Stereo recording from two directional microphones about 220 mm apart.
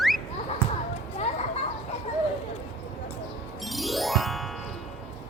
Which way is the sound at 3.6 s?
Centre (ahead or behind).